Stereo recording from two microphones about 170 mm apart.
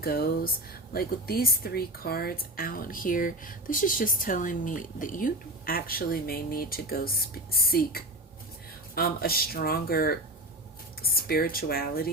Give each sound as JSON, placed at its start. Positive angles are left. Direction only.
{"t": 0.0, "sound": "speech", "side_deg": 60}